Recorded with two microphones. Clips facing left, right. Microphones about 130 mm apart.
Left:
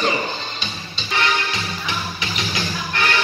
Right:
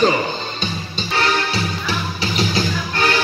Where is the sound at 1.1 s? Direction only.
35° right (ahead or behind).